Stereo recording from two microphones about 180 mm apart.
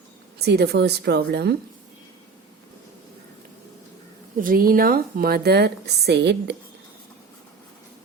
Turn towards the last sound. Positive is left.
turn(degrees=-75)  # may be behind; listen again after turning